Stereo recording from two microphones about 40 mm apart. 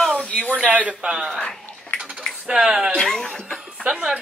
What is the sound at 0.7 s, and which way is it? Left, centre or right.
Speech, right.